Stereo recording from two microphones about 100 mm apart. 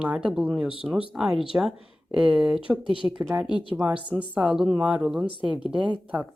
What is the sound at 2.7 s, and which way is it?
Speech, 20° right (ahead or behind).